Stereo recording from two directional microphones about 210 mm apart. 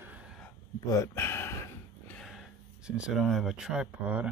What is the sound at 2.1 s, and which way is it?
Speech, centre (ahead or behind).